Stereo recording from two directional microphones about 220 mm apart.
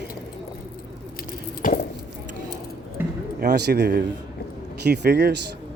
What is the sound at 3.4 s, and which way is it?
Speech, 50° right (ahead or behind).